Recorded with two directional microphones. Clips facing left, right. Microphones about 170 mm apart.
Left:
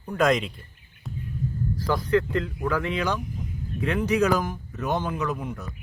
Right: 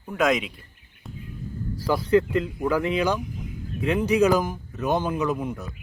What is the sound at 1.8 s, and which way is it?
Speech, 10° right (ahead or behind).